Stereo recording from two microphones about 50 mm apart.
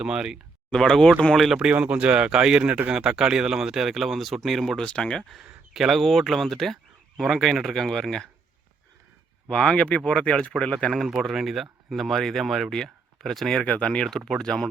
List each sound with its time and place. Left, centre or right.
0.0 s speech: centre
0.7 s speech: centre
1.5 s speech: right
2.9 s speech: centre
4.8 s speech: centre
5.4 s speech: centre
9.5 s speech: centre
11.2 s speech: centre
13.7 s speech: left